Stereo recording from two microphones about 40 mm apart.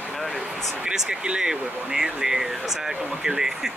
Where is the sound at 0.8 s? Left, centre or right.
Centre.